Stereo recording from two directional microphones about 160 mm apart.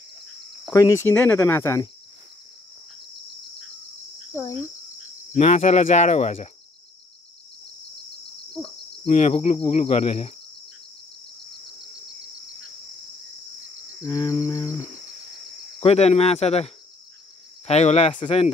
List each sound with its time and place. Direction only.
0.7 s speech: 20° left (ahead or behind)
5.3 s insect: 40° left (ahead or behind)
9.0 s insect: 45° left (ahead or behind)
14.0 s cricket: 25° left (ahead or behind)
15.8 s speech: 40° left (ahead or behind)